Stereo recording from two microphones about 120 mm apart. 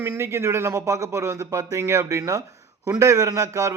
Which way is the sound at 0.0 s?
20° right (ahead or behind).